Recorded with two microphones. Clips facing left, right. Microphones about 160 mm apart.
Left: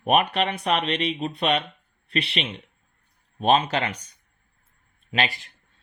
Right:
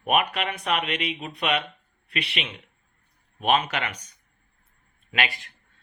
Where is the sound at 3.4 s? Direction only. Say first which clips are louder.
Left 3 dB; 30° left (ahead or behind).